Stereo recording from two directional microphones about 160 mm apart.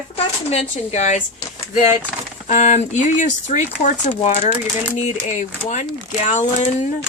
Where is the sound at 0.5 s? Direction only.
45° left (ahead or behind).